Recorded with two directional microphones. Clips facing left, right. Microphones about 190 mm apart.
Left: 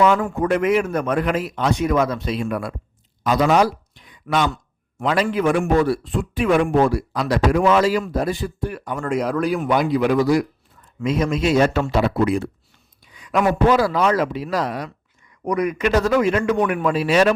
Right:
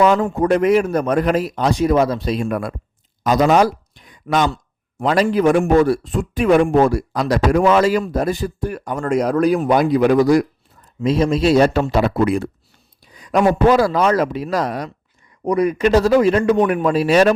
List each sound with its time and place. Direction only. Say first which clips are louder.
0.3 s a man's voice: right 4 dB; 35° right (ahead or behind)
11.0 s a man's voice: right 4 dB; 30° right (ahead or behind); by 12.4 s 55° right (ahead or behind)
13.1 s speech: right 4 dB; 35° right (ahead or behind)
15.4 s a man's voice: right 4 dB; 30° right (ahead or behind)